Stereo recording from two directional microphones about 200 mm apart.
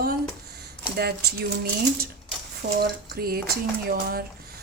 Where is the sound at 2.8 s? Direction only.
50° right (ahead or behind).